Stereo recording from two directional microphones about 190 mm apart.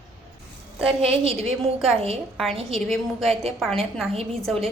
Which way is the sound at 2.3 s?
Centre (ahead or behind).